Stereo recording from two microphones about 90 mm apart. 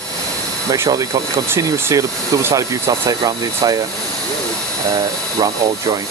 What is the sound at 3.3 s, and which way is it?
Speech, 45° right (ahead or behind).